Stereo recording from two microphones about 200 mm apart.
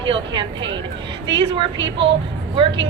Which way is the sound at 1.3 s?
65° right (ahead or behind).